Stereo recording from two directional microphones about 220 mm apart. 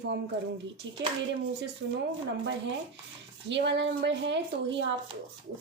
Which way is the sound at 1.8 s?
55° right (ahead or behind).